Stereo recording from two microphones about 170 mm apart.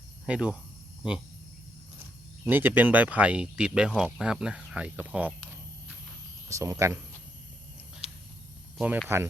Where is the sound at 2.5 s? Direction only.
10° right (ahead or behind).